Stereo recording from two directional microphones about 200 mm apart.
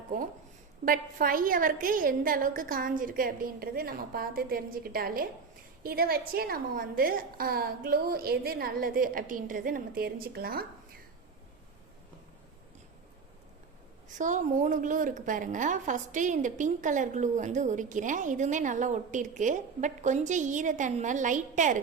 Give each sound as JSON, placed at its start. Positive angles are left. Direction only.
{"t": 0.9, "sound": "a woman's voice", "side_deg": -45}
{"t": 14.2, "sound": "a woman's voice", "side_deg": -40}